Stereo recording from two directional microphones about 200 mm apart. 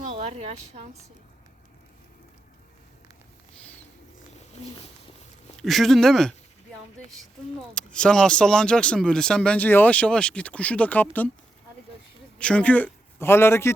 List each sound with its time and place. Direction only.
0.1 s a woman's voice: 30° right (ahead or behind)
5.5 s speech: centre (ahead or behind)
7.8 s speech: 5° left (ahead or behind)
12.4 s a man's voice: 5° left (ahead or behind)